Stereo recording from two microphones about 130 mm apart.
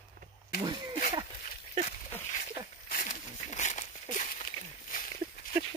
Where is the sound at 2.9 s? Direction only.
80° left.